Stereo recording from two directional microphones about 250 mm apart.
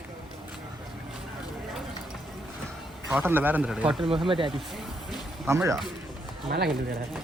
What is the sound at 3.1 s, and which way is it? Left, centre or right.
Speech, centre.